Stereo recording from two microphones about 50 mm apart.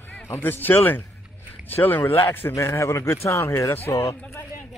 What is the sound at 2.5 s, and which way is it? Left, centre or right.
Speech, left.